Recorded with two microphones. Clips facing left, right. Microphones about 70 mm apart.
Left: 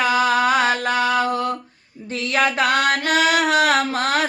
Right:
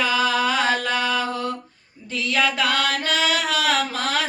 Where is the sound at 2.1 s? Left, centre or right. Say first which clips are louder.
Left 2 dB; left.